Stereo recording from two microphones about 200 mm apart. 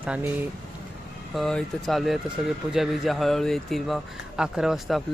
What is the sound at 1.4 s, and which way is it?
Speech, centre (ahead or behind).